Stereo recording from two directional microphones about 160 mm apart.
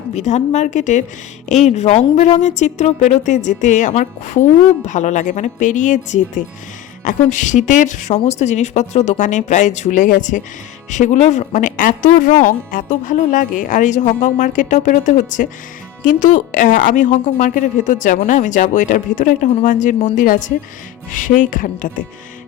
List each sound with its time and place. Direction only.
0.2 s a woman's voice: 45° left (ahead or behind)